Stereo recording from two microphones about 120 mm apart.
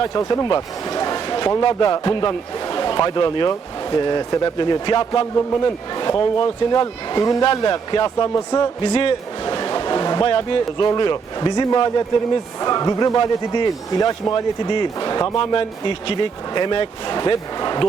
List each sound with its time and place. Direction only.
0.2 s speech: 25° left (ahead or behind)
0.4 s a man's voice: 35° left (ahead or behind)